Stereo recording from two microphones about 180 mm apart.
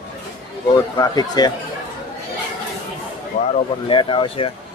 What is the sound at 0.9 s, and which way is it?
Speech, 20° left (ahead or behind).